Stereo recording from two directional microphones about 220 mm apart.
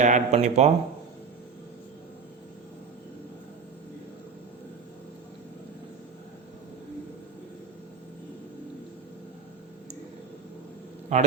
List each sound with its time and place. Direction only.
0.0 s speech: 30° right (ahead or behind)
11.1 s speech: 30° right (ahead or behind)